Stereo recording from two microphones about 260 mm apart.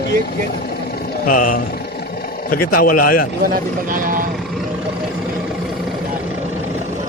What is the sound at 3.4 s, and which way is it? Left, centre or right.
Speech, right.